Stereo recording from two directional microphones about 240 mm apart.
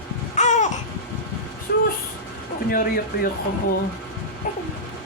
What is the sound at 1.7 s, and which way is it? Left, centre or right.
Vehicle, left.